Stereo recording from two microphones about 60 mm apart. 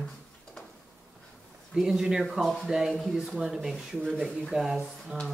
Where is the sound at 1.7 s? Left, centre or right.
Centre.